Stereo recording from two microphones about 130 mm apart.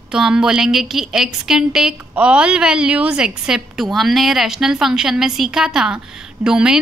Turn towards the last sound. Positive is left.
turn(degrees=-5)  # may be behind; listen again after turning